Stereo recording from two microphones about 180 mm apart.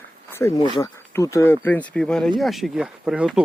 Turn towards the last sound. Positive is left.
turn(degrees=-5)  # may be behind; listen again after turning